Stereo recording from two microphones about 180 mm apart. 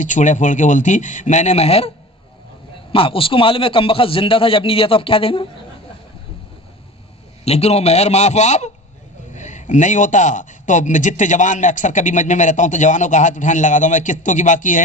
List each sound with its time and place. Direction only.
0.0 s a man's voice: 45° left (ahead or behind)
2.9 s a man's voice: 30° left (ahead or behind)
7.4 s a man's voice: 35° left (ahead or behind)